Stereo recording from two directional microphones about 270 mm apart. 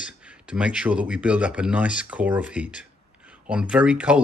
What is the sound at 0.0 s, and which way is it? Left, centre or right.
Speech, centre.